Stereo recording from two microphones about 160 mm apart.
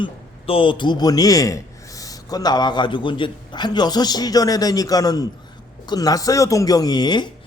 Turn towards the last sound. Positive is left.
turn(degrees=25)  # may be behind; listen again after turning